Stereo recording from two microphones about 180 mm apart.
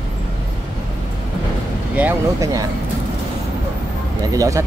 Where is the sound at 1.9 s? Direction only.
10° right (ahead or behind).